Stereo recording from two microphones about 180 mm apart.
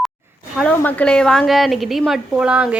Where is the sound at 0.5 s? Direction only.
5° left (ahead or behind).